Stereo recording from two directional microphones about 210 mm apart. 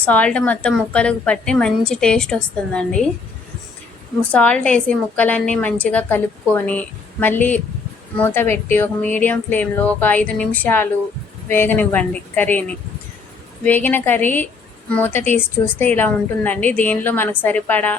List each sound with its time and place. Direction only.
0.0 s a woman's voice: 5° left (ahead or behind)
4.3 s speech: 5° left (ahead or behind)